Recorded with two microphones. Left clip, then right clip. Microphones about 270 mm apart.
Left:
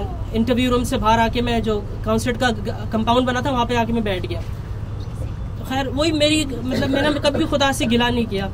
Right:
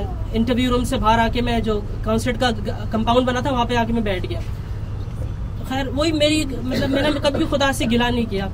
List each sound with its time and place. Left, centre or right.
0.3 s a man's voice: centre
5.7 s a man's voice: centre